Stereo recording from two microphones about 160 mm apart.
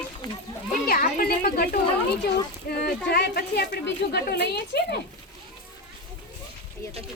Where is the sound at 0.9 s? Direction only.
70° left (ahead or behind); by 5.0 s 90° left.